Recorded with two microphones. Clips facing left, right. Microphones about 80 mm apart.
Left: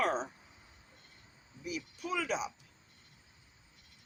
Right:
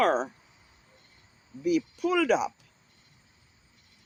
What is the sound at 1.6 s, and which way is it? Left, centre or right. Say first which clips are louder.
Speech: right 13 dB; right.